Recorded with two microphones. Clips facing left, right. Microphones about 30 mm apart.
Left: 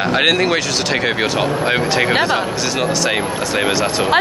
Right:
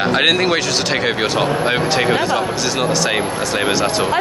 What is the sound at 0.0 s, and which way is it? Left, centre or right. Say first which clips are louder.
Speech: even; centre.